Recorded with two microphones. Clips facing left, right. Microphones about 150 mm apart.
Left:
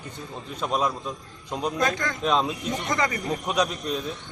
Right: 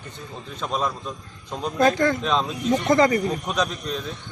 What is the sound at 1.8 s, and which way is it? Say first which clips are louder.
Speech: right 9 dB; 30° right (ahead or behind).